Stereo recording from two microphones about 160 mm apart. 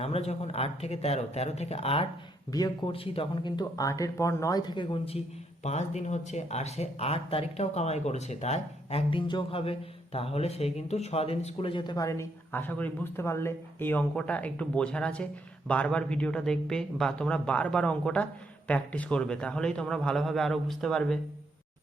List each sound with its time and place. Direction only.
0.0 s speech: 40° left (ahead or behind)
2.5 s speech: 25° left (ahead or behind)
5.6 s a man's voice: 45° left (ahead or behind); by 21.2 s 5° left (ahead or behind)